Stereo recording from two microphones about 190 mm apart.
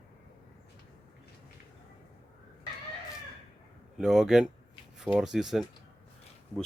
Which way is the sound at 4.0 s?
Centre (ahead or behind).